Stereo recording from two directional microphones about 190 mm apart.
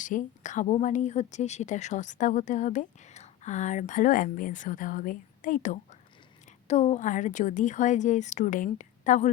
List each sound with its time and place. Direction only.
0.0 s a woman's voice: 40° left (ahead or behind)